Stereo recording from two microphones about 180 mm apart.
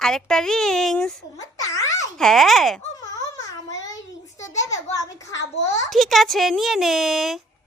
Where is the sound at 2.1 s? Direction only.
Centre (ahead or behind).